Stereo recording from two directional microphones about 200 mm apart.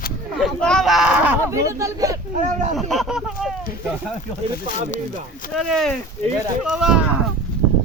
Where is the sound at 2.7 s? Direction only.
Centre (ahead or behind).